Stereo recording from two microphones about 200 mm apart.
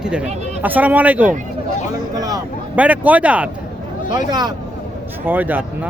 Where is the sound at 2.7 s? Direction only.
5° right (ahead or behind).